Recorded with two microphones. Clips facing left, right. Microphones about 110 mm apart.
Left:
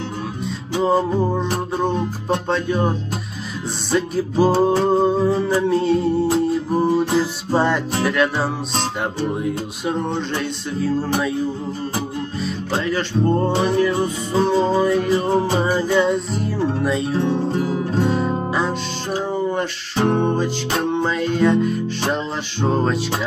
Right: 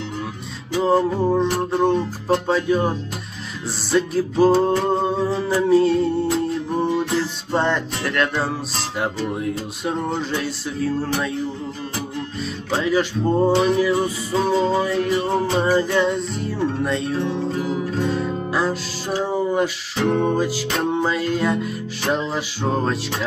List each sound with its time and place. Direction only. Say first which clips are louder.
0.8 s music: even; centre (ahead or behind)
3.9 s music: even; centre (ahead or behind)
12.7 s music: right 2 dB; 5° right (ahead or behind)
17.2 s music: left 3 dB; 30° left (ahead or behind)
18.5 s music: even; centre (ahead or behind)
20.0 s music: left 1 dB; 35° left (ahead or behind)
20.2 s music: even; 5° right (ahead or behind)